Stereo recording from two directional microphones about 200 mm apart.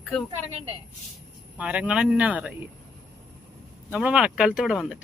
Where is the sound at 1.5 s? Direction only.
5° right (ahead or behind).